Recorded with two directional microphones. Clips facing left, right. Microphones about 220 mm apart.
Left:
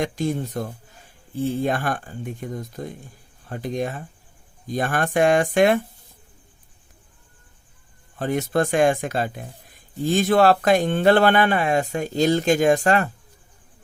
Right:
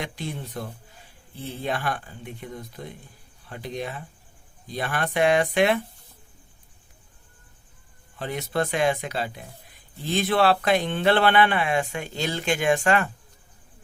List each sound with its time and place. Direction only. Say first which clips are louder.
0.0 s speech: left 9 dB; 45° left (ahead or behind)
8.2 s speech: left 5 dB; 45° left (ahead or behind)